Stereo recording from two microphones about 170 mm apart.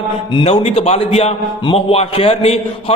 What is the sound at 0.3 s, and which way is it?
A man's voice, 35° left (ahead or behind).